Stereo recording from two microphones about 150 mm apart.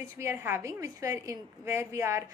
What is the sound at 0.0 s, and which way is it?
A woman's voice, 20° right (ahead or behind).